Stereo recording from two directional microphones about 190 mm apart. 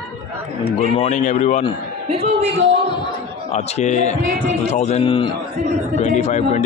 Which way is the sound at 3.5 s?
35° left (ahead or behind).